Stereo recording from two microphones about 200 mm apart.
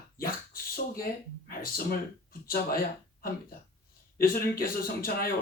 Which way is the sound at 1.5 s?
45° left (ahead or behind).